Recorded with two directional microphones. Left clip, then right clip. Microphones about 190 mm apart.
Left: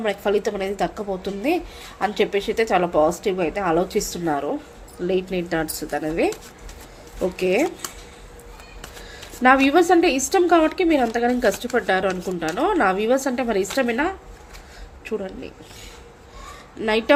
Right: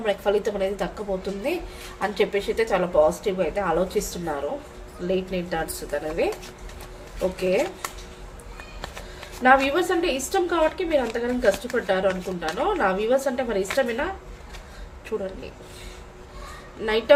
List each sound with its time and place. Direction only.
0.0 s a woman's voice: 45° left (ahead or behind)
7.3 s speech: 40° left (ahead or behind)
9.4 s a woman's voice: 45° left (ahead or behind)